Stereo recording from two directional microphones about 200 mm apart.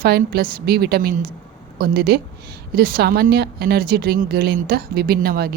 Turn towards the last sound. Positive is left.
turn(degrees=-50)  # may be behind; listen again after turning